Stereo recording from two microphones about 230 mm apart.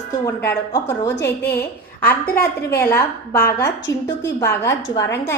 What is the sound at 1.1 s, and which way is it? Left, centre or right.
Speech, left.